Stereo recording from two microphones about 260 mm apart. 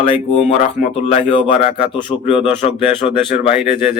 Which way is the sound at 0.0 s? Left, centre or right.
Centre.